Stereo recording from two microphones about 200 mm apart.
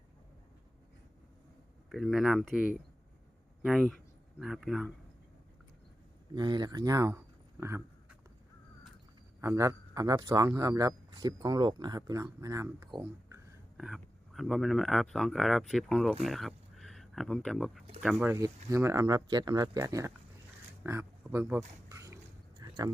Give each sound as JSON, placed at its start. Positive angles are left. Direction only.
{"t": 1.9, "sound": "speech", "side_deg": 0}
{"t": 6.3, "sound": "speech", "side_deg": -20}
{"t": 9.4, "sound": "a man's voice", "side_deg": -15}
{"t": 13.7, "sound": "a man's voice", "side_deg": 0}
{"t": 21.8, "sound": "a sound", "side_deg": -15}